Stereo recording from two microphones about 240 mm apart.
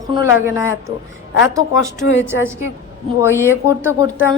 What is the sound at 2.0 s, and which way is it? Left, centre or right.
Speech, left.